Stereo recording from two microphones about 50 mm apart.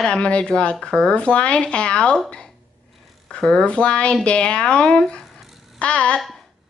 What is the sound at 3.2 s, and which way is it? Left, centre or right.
Speech, centre.